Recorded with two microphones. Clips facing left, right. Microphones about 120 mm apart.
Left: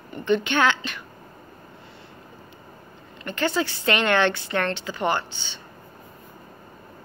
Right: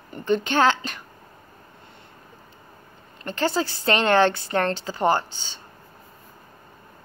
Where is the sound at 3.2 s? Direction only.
35° right (ahead or behind).